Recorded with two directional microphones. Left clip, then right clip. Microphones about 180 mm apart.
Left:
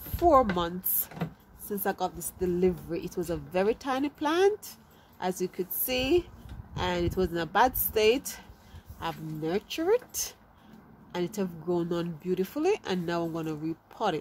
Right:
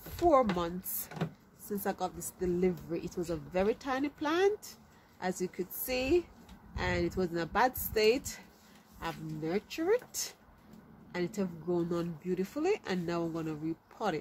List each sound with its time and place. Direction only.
0.6 s a woman's voice: 25° left (ahead or behind)